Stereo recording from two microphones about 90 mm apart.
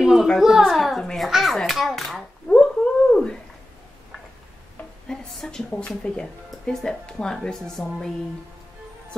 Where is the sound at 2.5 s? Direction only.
20° left (ahead or behind).